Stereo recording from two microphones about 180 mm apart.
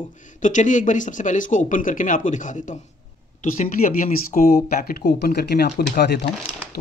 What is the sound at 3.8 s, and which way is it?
Speech, 45° left (ahead or behind).